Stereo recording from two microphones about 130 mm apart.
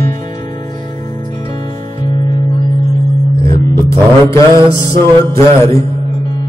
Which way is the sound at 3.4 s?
20° left (ahead or behind).